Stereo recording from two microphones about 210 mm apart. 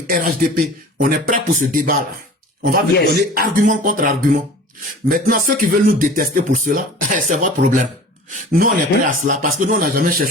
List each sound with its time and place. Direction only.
0.1 s speech: 40° right (ahead or behind)